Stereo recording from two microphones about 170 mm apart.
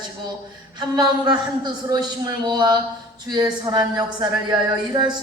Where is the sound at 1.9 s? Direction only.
25° right (ahead or behind).